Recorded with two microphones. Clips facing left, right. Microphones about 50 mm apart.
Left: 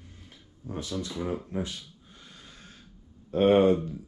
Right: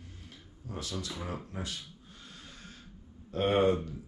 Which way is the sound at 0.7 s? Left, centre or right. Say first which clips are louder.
Left 4 dB; left.